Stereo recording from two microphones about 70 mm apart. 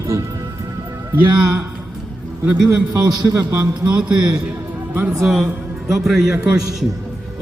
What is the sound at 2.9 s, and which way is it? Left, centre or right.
Speech, right.